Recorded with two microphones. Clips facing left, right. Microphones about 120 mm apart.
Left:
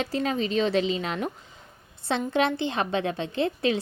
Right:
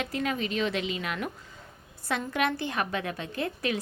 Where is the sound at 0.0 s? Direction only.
30° left (ahead or behind).